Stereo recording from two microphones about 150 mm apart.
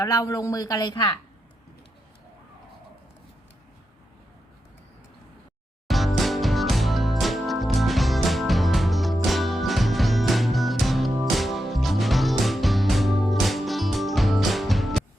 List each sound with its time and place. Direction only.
0.0 s a woman's voice: 25° left (ahead or behind)
5.9 s music: centre (ahead or behind)